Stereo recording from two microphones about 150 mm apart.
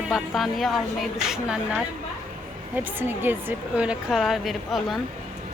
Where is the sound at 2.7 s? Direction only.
15° right (ahead or behind).